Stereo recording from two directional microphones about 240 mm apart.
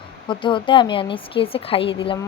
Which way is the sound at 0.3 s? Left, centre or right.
Left.